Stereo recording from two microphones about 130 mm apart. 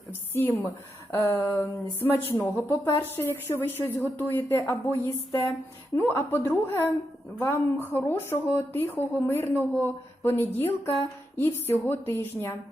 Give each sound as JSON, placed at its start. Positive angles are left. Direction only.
{"t": 0.1, "sound": "a woman's voice", "side_deg": 15}